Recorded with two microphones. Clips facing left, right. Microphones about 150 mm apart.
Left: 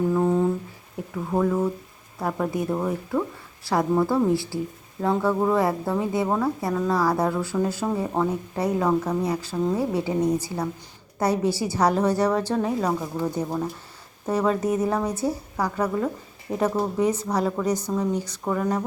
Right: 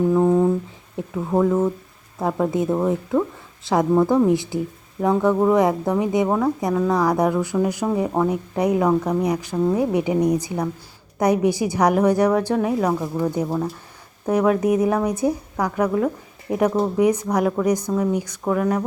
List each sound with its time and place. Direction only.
0.1 s humming: 15° right (ahead or behind)
1.1 s a woman's voice: 20° right (ahead or behind); by 18.8 s 5° right (ahead or behind)